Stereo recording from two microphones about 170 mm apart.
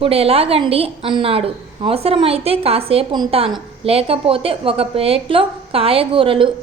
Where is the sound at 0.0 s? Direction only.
35° right (ahead or behind).